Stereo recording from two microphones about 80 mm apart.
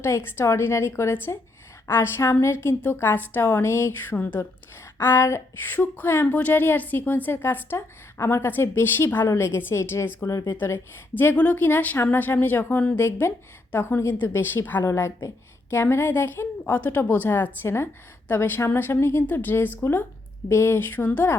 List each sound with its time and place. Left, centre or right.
0.0 s a woman's voice: left
10.5 s a woman's voice: left